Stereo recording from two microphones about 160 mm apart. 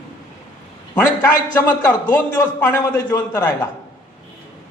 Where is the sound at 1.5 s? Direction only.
25° left (ahead or behind).